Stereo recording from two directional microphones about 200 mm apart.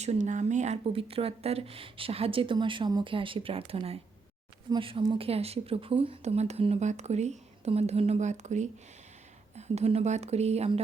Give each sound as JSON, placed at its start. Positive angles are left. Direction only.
{"t": 0.0, "sound": "speech", "side_deg": -35}